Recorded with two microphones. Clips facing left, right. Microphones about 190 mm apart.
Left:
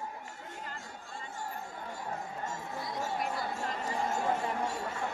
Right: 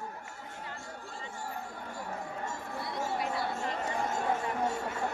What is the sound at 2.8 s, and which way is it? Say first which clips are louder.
Chatter: right 1 dB; 65° right (ahead or behind).